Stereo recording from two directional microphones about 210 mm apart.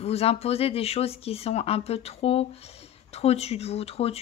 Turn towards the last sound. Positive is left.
turn(degrees=30)  # may be behind; listen again after turning